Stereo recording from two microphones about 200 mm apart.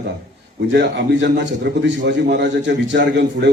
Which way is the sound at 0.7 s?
60° right (ahead or behind).